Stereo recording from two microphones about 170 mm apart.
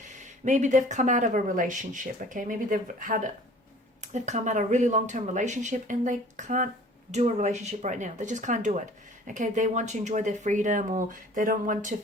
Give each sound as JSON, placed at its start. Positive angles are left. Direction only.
{"t": 0.4, "sound": "speech", "side_deg": -45}